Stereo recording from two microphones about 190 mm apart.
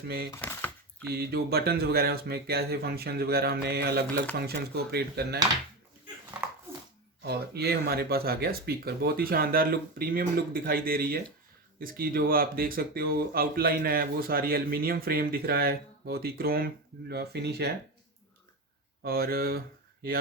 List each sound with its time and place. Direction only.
0.3 s chopping: 10° left (ahead or behind)
1.1 s speech: 55° right (ahead or behind)
7.2 s speech: 60° right (ahead or behind)
19.0 s mantra: 55° right (ahead or behind)